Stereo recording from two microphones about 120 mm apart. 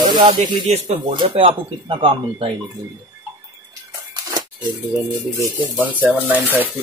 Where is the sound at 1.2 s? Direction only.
50° right (ahead or behind).